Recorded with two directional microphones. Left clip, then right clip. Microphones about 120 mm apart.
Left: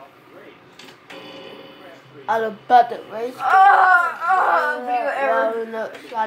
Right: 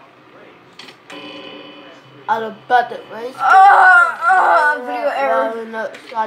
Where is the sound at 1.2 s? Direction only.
30° right (ahead or behind).